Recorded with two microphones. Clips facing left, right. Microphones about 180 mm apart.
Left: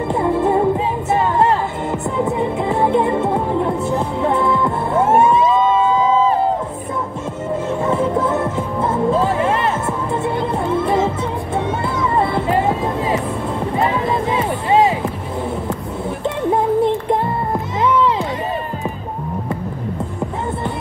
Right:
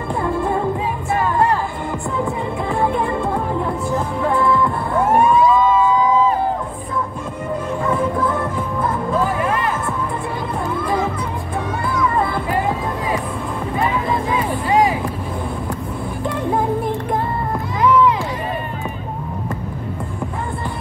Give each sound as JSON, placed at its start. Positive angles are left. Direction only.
{"t": 0.1, "sound": "music", "side_deg": 20}
{"t": 7.8, "sound": "music", "side_deg": 25}
{"t": 10.7, "sound": "music", "side_deg": 25}